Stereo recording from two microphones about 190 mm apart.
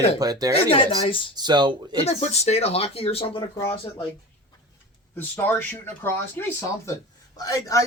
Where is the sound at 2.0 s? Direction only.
35° left (ahead or behind).